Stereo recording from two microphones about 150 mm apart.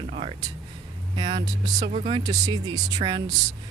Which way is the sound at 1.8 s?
40° right (ahead or behind).